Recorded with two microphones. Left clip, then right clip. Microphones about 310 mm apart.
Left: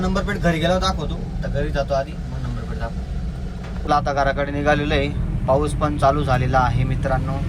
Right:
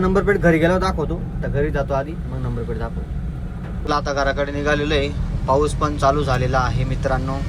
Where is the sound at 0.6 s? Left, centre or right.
Right.